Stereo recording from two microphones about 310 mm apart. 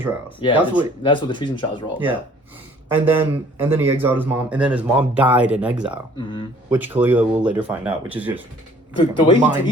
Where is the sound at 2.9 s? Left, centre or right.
Centre.